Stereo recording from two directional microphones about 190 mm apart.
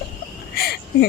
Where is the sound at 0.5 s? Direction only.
55° left (ahead or behind).